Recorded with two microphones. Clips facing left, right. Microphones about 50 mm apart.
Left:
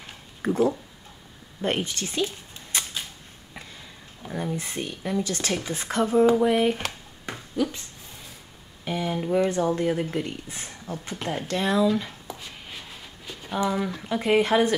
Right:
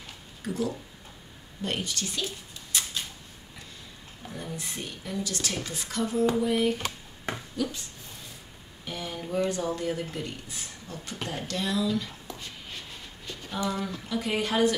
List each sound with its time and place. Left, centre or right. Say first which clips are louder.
0.4 s speech: left 8 dB; left
4.2 s speech: left 7 dB; centre
4.6 s speech: left 5 dB; left
8.8 s speech: left 8 dB; left
12.3 s a sound: left 2 dB; centre
14.0 s speech: left 8 dB; left